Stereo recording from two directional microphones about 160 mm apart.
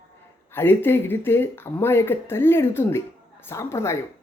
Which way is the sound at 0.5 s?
15° left (ahead or behind).